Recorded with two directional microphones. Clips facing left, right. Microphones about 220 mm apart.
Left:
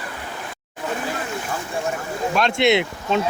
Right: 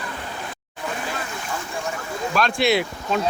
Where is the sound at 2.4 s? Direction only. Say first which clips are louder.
Left 2 dB; 20° left (ahead or behind).